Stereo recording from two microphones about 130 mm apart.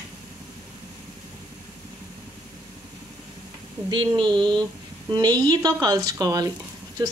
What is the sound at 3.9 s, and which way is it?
Speech, 35° right (ahead or behind).